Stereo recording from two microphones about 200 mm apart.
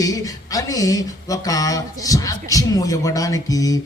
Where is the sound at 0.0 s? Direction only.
15° left (ahead or behind).